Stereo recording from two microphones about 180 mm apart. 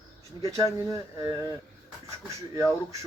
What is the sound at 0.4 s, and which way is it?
Speech, 15° right (ahead or behind).